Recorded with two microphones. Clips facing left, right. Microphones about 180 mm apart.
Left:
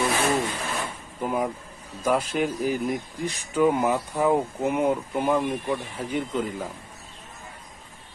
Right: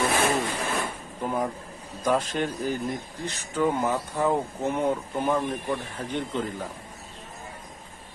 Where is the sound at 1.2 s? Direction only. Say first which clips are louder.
Left 2 dB; 5° left (ahead or behind).